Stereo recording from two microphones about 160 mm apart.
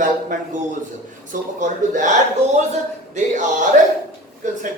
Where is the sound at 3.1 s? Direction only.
50° right (ahead or behind).